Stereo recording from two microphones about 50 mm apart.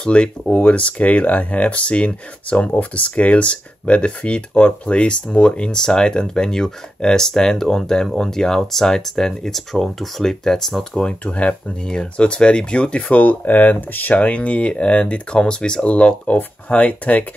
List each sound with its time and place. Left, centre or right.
0.0 s speech: left